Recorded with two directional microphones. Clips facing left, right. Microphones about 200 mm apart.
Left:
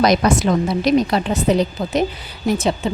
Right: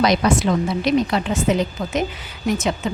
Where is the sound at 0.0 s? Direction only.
40° left (ahead or behind).